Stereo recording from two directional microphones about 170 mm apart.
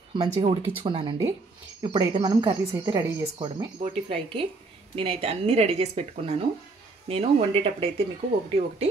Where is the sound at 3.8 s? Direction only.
30° right (ahead or behind).